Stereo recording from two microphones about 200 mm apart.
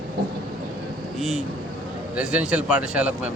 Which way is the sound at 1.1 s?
Centre (ahead or behind).